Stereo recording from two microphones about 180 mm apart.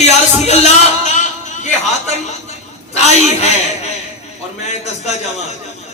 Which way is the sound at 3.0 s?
35° left (ahead or behind).